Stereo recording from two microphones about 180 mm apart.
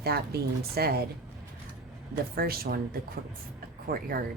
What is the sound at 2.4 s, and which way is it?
Speech, 55° right (ahead or behind).